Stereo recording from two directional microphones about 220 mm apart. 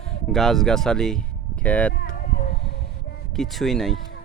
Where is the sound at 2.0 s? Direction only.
40° left (ahead or behind).